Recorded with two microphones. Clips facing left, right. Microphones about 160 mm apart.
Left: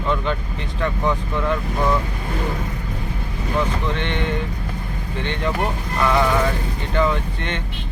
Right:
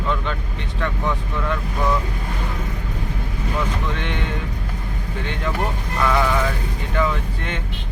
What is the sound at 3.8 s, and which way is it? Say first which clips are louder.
Speech: left 3 dB; 5° right (ahead or behind).